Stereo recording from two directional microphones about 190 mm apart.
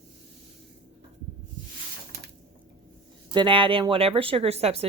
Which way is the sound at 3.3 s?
25° right (ahead or behind).